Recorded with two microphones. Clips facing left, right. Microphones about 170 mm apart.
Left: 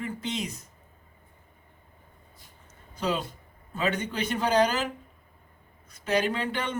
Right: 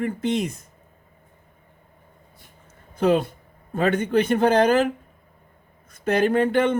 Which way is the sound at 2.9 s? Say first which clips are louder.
Right 10 dB; 55° right (ahead or behind).